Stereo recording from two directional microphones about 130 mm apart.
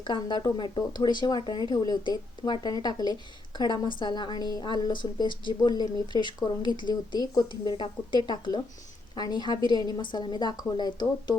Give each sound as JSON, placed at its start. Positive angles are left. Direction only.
{"t": 0.0, "sound": "a woman's voice", "side_deg": 35}